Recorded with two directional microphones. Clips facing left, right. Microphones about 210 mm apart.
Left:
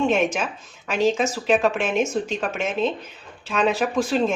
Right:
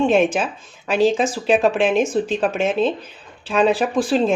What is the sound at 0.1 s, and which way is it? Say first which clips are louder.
Speech: right 5 dB; 35° right (ahead or behind).